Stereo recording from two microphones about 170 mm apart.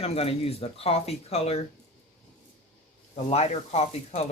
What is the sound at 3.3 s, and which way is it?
Speech, 40° left (ahead or behind).